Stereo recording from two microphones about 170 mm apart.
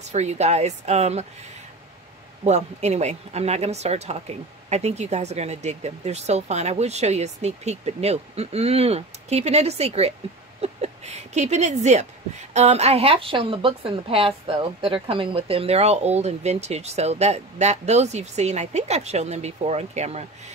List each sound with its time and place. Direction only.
0.0 s a woman's voice: 40° right (ahead or behind)
2.4 s a woman's voice: 40° right (ahead or behind)